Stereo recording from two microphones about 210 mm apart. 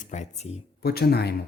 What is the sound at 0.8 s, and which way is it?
Speech, 50° left (ahead or behind).